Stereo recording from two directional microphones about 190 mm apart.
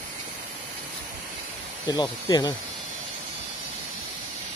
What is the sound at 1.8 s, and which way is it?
Speech, 20° left (ahead or behind).